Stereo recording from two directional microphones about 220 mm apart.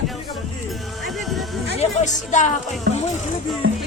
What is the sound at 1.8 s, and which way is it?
Music, 35° left (ahead or behind).